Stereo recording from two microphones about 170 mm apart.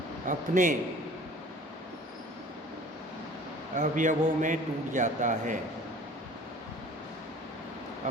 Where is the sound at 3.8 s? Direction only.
50° right (ahead or behind).